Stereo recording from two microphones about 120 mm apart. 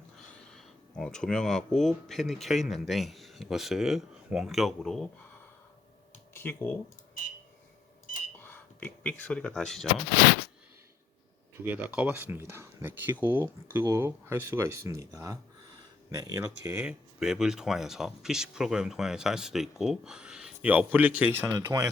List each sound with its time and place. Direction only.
0.5 s speech: 5° left (ahead or behind)
6.3 s speech: 15° left (ahead or behind)
8.4 s speech: 15° left (ahead or behind)
11.6 s speech: 15° right (ahead or behind)
16.8 s speech: 5° right (ahead or behind)
21.4 s speech: 30° right (ahead or behind)